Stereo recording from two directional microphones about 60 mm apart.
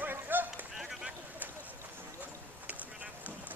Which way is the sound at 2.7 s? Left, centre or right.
Right.